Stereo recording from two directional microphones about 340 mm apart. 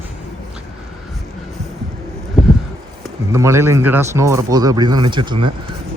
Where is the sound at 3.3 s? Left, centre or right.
Centre.